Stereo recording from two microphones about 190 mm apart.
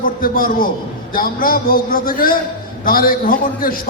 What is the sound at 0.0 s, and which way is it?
A man's voice, 50° left (ahead or behind).